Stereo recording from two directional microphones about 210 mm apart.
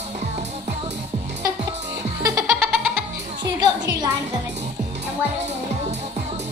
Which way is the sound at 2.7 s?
Centre (ahead or behind).